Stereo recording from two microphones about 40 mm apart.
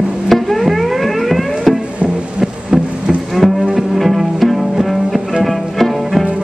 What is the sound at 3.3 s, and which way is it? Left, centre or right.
Music, centre.